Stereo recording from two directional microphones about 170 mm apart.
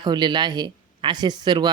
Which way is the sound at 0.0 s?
25° right (ahead or behind).